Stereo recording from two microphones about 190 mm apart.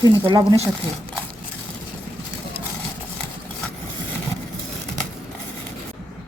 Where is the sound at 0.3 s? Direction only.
30° right (ahead or behind).